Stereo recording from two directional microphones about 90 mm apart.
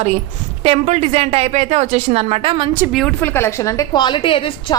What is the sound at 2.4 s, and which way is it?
Speech, 90° right.